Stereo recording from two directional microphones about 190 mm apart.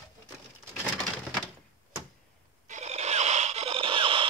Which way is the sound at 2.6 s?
40° right (ahead or behind).